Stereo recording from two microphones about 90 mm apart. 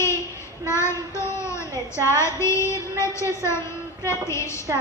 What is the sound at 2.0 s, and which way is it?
Female singing, 30° left (ahead or behind).